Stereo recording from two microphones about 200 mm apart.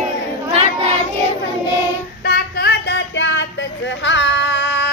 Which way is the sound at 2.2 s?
50° left (ahead or behind).